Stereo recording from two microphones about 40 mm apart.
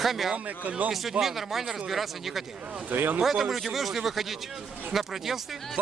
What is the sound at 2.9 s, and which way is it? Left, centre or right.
Speech, right.